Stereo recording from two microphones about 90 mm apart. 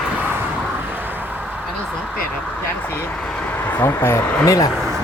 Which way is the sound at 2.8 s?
25° left (ahead or behind).